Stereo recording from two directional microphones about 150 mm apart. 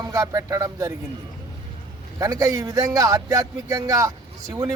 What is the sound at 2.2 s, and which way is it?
Speech, 25° right (ahead or behind).